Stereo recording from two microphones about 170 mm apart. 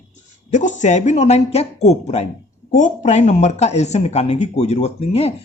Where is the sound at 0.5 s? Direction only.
45° left (ahead or behind).